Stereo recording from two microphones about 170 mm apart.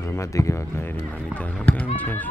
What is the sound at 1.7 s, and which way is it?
Speech, 10° left (ahead or behind).